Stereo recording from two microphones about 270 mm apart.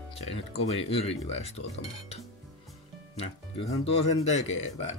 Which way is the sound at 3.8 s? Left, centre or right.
Left.